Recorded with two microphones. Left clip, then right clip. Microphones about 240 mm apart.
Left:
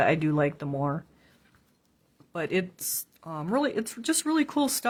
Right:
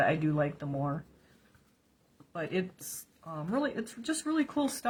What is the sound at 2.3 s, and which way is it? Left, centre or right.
Speech, left.